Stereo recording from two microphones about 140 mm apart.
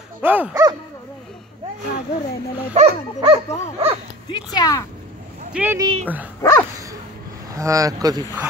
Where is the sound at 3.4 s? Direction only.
55° left (ahead or behind).